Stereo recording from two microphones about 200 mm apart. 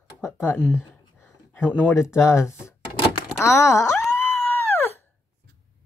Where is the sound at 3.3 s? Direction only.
15° left (ahead or behind).